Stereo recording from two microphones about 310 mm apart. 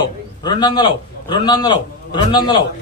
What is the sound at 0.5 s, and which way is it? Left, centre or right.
A man's voice, centre.